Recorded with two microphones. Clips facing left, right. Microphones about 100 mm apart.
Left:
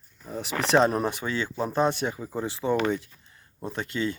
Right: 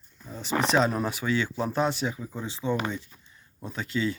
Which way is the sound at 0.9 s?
20° left (ahead or behind).